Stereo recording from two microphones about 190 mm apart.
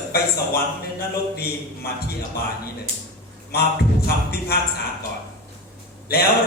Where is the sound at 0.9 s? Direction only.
55° left (ahead or behind).